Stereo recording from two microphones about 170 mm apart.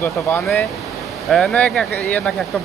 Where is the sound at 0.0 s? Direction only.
10° left (ahead or behind).